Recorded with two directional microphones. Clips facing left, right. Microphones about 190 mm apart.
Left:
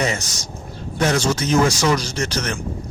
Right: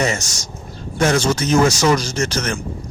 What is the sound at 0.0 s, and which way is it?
Speech, 45° right (ahead or behind).